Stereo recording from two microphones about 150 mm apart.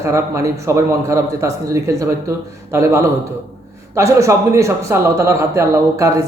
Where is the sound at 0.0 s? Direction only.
20° right (ahead or behind).